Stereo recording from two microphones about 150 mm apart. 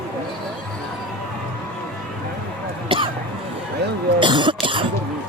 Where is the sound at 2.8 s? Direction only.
35° right (ahead or behind).